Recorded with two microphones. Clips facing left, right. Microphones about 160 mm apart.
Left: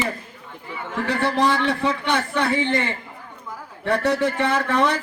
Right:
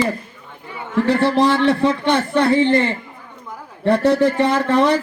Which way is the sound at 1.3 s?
20° right (ahead or behind).